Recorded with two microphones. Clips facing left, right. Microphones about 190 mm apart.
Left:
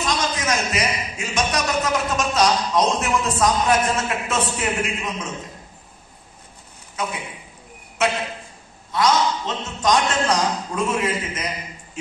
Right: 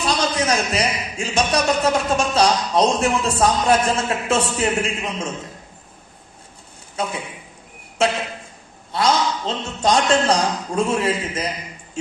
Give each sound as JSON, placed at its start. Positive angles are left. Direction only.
{"t": 0.0, "sound": "a man's voice", "side_deg": -35}
{"t": 7.0, "sound": "a man's voice", "side_deg": -30}